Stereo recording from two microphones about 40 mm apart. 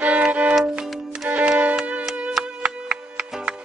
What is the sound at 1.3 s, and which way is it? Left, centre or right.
Music, right.